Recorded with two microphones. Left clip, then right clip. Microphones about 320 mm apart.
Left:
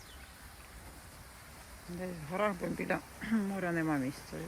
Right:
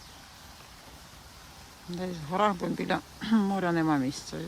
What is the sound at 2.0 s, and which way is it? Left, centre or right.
Speech, centre.